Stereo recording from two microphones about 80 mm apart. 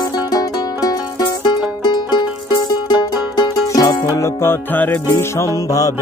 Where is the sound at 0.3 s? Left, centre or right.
Left.